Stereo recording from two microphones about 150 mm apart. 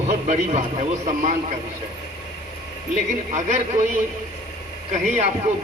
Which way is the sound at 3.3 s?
50° right (ahead or behind).